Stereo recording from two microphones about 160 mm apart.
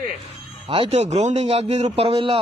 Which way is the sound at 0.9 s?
45° right (ahead or behind).